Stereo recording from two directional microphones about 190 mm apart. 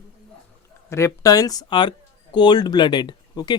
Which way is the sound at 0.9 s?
15° left (ahead or behind).